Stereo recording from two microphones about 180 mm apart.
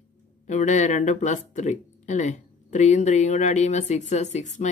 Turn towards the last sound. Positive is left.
turn(degrees=40)  # may be behind; listen again after turning